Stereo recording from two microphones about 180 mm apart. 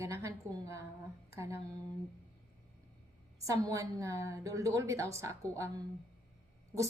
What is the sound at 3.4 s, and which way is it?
A woman's voice, 15° right (ahead or behind).